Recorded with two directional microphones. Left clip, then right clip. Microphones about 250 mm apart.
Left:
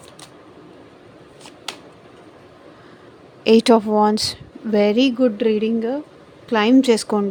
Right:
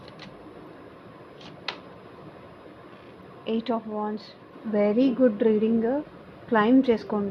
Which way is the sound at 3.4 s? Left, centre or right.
Left.